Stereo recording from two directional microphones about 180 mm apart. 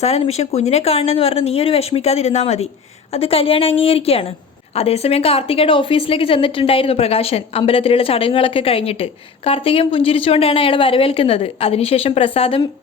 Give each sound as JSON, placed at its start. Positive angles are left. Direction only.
{"t": 0.0, "sound": "a woman's voice", "side_deg": 35}